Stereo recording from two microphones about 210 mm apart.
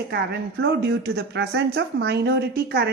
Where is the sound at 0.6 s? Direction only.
55° right (ahead or behind).